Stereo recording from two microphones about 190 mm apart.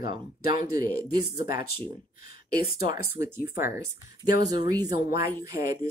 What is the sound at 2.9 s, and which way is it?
Speech, 15° right (ahead or behind).